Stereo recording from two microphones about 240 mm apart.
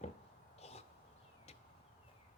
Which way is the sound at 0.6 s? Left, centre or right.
Left.